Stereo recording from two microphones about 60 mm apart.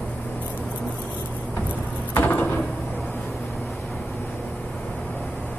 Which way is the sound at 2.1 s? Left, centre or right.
Left.